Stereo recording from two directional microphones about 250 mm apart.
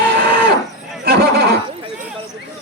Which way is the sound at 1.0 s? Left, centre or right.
Right.